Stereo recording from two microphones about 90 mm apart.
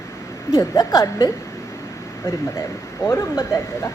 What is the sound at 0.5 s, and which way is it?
Speech, 35° left (ahead or behind).